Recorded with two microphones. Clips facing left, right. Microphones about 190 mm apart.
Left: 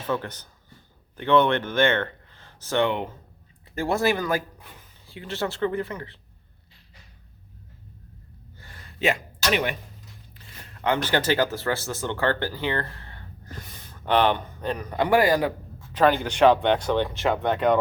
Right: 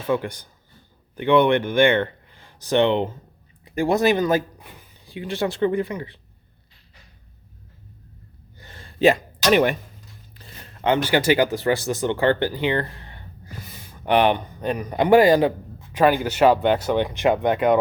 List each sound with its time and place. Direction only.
0.1 s speech: 10° right (ahead or behind)
8.5 s a sound: 25° right (ahead or behind)
10.8 s speech: 20° right (ahead or behind)
15.9 s speech: 10° right (ahead or behind)